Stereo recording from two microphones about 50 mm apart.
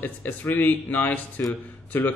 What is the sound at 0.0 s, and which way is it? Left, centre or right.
Speech, left.